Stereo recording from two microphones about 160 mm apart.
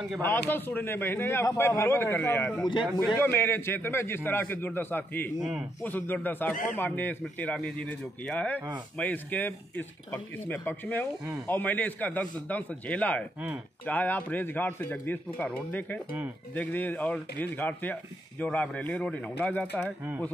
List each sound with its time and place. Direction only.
0.5 s speech: 10° left (ahead or behind)
5.4 s a man's voice: 5° right (ahead or behind)
5.8 s speech: 10° left (ahead or behind)
6.5 s speech: 55° left (ahead or behind)
6.8 s speech: 10° left (ahead or behind)